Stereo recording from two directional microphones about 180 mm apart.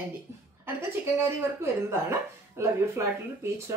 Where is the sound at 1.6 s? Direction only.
15° right (ahead or behind).